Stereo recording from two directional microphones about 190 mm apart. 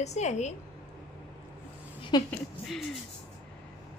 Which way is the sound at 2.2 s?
Centre (ahead or behind).